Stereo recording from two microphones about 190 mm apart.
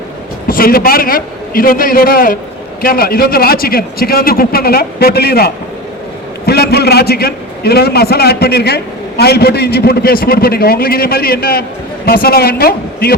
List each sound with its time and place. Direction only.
0.4 s a man's voice: 50° left (ahead or behind)